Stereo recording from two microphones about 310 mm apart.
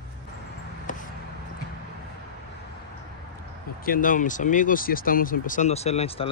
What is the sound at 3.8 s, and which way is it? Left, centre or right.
Speech, left.